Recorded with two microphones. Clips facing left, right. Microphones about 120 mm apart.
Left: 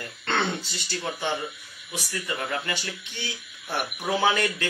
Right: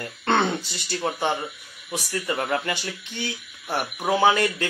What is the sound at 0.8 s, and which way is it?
Speech, 35° right (ahead or behind).